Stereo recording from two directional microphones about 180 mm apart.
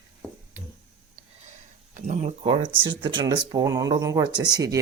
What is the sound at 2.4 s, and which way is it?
Speech, 30° right (ahead or behind).